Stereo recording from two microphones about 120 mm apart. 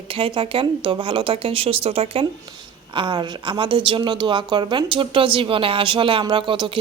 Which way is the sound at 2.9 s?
40° right (ahead or behind).